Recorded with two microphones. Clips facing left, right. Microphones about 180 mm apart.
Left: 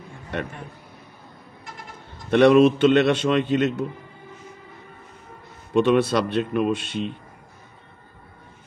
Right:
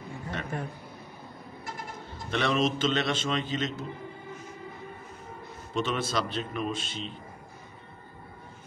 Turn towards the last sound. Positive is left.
turn(degrees=65)  # may be behind; listen again after turning